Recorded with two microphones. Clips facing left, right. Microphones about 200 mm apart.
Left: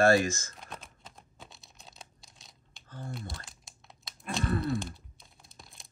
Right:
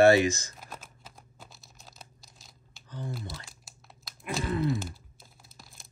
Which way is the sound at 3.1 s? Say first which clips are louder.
Even; centre (ahead or behind).